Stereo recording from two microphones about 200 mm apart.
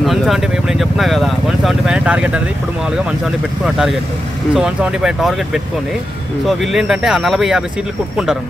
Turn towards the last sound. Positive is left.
turn(degrees=0)  # may be behind; listen again after turning